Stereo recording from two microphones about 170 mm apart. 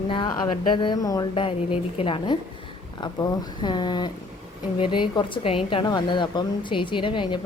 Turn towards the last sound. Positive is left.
turn(degrees=30)  # may be behind; listen again after turning